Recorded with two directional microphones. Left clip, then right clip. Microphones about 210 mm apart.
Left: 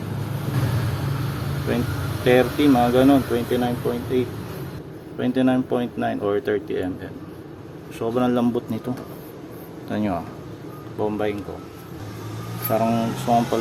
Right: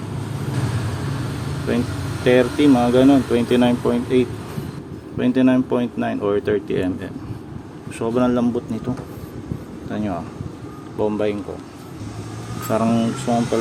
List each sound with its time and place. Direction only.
1.7 s speech: 5° right (ahead or behind)
3.3 s speech: 25° right (ahead or behind); by 8.8 s centre (ahead or behind)
9.9 s speech: centre (ahead or behind)
11.0 s speech: 15° right (ahead or behind)
12.7 s speech: 15° right (ahead or behind)